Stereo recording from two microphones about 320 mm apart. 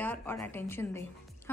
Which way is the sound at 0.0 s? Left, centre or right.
Centre.